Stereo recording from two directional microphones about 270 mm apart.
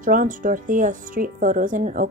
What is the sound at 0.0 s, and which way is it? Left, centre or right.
Speech, right.